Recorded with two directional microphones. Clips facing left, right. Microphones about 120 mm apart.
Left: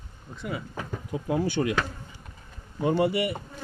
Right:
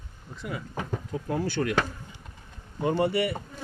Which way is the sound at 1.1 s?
15° left (ahead or behind).